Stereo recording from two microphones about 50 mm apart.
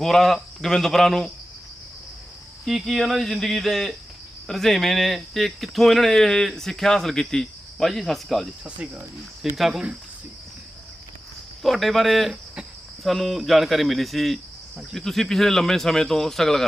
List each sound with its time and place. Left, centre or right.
0.0 s speech: centre
2.6 s speech: centre
8.6 s speech: right
9.6 s speech: centre
11.6 s speech: centre